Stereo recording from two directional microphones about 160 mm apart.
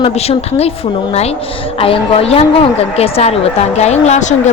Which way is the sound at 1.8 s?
35° left (ahead or behind).